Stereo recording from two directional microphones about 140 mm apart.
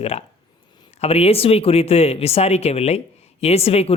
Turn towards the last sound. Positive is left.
turn(degrees=45)  # may be behind; listen again after turning